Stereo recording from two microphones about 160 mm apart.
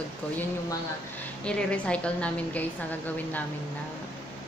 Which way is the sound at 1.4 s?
5° left (ahead or behind).